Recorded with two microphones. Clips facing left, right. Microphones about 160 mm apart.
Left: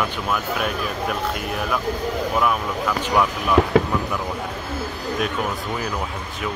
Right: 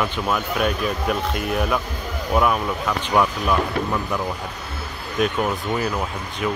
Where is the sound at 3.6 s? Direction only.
90° left.